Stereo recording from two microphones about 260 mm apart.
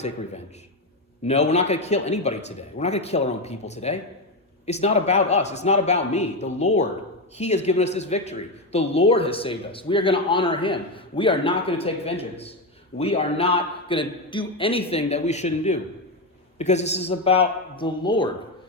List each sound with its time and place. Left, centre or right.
1.2 s a man's voice: left